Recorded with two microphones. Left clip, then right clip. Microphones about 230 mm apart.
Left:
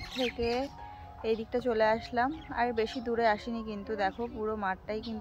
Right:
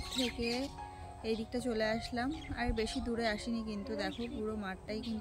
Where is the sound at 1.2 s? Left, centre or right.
Centre.